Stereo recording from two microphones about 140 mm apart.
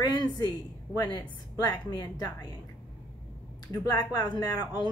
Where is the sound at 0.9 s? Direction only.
30° left (ahead or behind).